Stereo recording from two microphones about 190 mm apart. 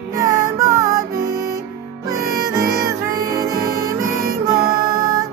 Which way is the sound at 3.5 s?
50° right (ahead or behind).